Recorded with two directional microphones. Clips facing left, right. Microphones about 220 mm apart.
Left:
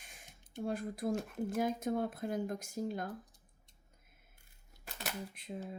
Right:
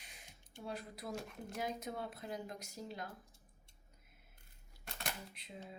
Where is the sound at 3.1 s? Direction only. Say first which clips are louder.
Left 9 dB; 20° left (ahead or behind).